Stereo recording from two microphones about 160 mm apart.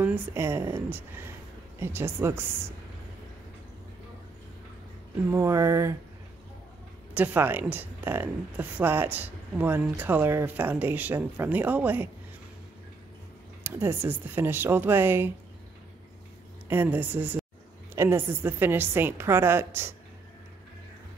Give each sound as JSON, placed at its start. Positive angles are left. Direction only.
{"t": 0.0, "sound": "speech", "side_deg": -15}
{"t": 5.3, "sound": "a sound", "side_deg": -20}
{"t": 7.2, "sound": "speech", "side_deg": -10}
{"t": 13.7, "sound": "speech", "side_deg": -15}
{"t": 16.6, "sound": "speech", "side_deg": -10}